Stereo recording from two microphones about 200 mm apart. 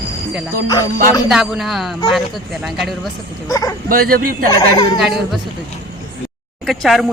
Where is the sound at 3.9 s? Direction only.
45° right (ahead or behind).